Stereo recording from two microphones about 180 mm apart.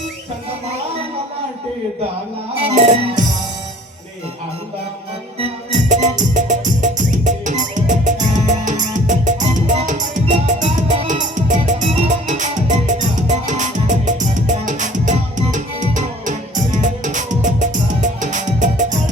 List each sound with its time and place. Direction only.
2.6 s music: 40° right (ahead or behind)
5.9 s music: 45° right (ahead or behind)